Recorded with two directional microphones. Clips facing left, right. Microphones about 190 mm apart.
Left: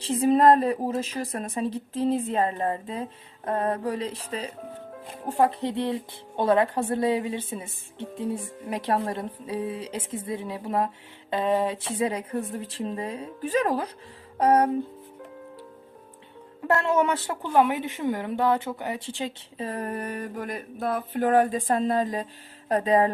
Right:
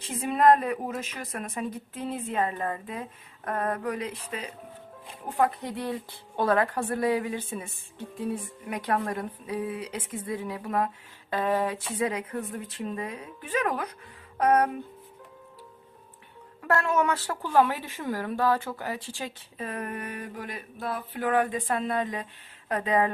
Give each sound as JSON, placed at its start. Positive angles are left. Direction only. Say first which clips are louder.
{"t": 0.0, "sound": "a woman's voice", "louder": "left 4 dB", "side_deg": 30}
{"t": 16.6, "sound": "a woman's voice", "louder": "left 2 dB", "side_deg": 25}